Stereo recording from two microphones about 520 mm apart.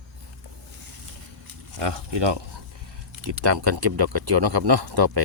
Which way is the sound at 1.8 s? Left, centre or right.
Right.